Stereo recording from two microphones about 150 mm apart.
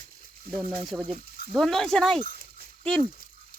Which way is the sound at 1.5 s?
5° left (ahead or behind).